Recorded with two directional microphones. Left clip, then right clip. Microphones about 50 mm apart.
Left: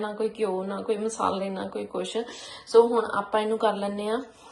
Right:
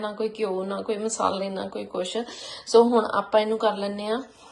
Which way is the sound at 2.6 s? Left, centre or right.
Right.